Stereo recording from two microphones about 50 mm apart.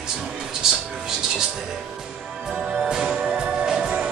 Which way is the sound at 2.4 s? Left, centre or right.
Centre.